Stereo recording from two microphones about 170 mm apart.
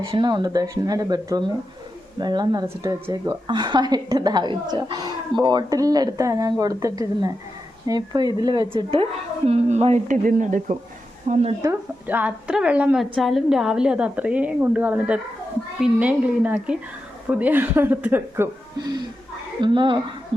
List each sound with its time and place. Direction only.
0.0 s a woman's voice: 30° right (ahead or behind)
11.6 s a woman's voice: 10° right (ahead or behind)
18.8 s a woman's voice: 25° right (ahead or behind)